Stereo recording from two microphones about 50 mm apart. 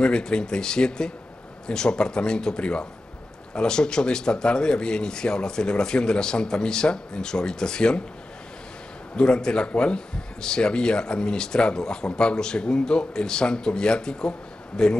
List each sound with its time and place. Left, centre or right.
0.0 s speech: centre
9.1 s speech: centre